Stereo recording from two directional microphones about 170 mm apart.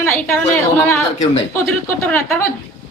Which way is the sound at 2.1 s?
10° left (ahead or behind).